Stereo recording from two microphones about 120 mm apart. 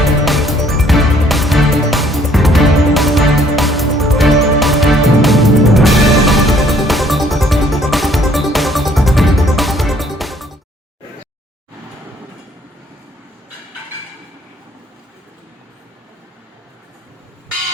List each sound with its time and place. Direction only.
0.0 s music: centre (ahead or behind)